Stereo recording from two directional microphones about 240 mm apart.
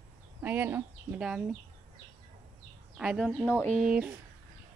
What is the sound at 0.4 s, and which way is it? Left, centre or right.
Speech, centre.